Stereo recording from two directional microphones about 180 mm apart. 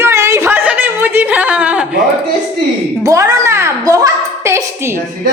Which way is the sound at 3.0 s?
20° right (ahead or behind).